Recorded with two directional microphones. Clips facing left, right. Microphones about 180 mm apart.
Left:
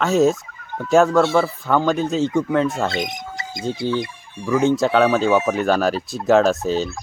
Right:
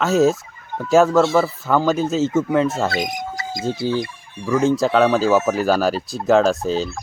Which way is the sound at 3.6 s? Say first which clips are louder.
Right 1 dB; 5° right (ahead or behind).